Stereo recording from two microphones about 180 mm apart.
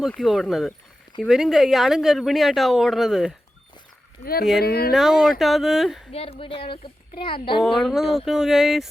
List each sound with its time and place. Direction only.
0.0 s speech: centre (ahead or behind)
4.2 s speech: 55° left (ahead or behind)
4.9 s speech: centre (ahead or behind)
6.1 s a woman's voice: 35° left (ahead or behind)
7.6 s speech: centre (ahead or behind)